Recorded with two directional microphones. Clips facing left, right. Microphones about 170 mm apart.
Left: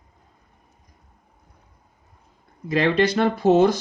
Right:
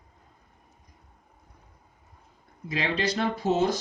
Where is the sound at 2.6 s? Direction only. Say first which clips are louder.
Left 9 dB; 60° left (ahead or behind).